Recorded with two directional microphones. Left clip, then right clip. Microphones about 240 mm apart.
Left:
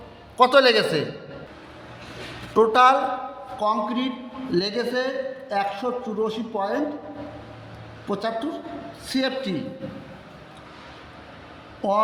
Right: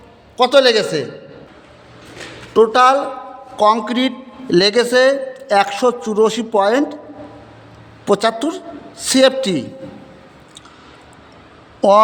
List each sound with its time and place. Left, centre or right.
0.3 s a man's voice: centre
2.5 s a man's voice: right
3.6 s a man's voice: right
8.0 s a man's voice: right
11.8 s a man's voice: right